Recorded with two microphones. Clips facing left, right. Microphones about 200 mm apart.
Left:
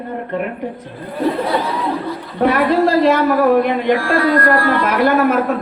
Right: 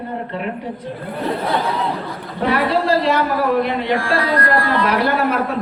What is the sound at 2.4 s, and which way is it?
A woman's voice, 50° left (ahead or behind).